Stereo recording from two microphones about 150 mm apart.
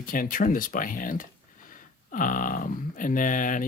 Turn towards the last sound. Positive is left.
turn(degrees=60)  # may be behind; listen again after turning